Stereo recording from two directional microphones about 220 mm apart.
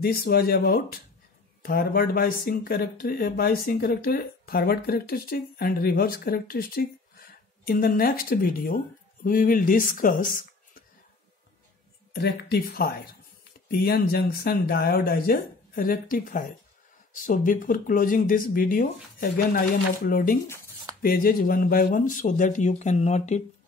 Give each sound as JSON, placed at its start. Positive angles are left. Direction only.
{"t": 0.0, "sound": "speech", "side_deg": 45}
{"t": 12.1, "sound": "speech", "side_deg": 45}